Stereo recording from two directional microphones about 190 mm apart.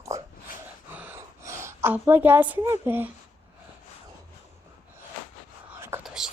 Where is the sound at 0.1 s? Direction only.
15° right (ahead or behind).